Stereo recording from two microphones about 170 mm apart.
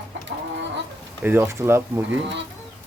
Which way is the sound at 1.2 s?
10° right (ahead or behind).